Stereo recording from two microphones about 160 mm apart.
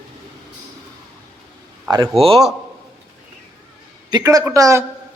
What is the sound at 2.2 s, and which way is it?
Speech, 35° right (ahead or behind).